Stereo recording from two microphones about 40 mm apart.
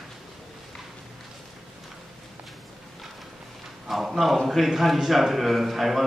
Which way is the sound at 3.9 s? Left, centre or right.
Centre.